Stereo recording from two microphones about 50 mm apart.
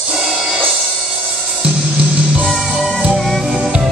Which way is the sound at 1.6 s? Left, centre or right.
Right.